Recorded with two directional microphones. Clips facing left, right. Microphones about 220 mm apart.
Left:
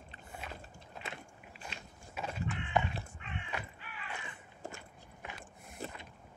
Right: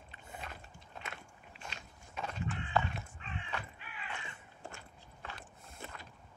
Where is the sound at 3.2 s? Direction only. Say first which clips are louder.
Left 1 dB; 35° right (ahead or behind).